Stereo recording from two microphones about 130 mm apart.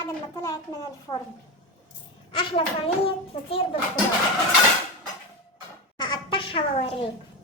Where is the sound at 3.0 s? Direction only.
45° left (ahead or behind).